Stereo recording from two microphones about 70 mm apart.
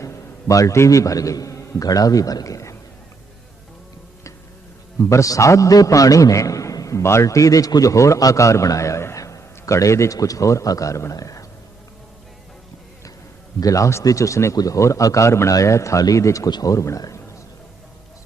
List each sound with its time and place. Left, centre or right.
0.0 s a man's voice: left
4.9 s a man's voice: left
13.6 s a man's voice: left
14.5 s a man's voice: left
14.8 s a man's voice: left
16.5 s speech: left
16.7 s a man's voice: left